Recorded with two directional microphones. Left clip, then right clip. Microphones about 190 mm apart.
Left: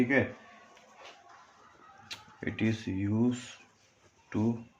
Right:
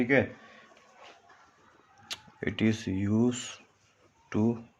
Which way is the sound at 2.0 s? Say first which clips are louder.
Right 4 dB; 50° right (ahead or behind).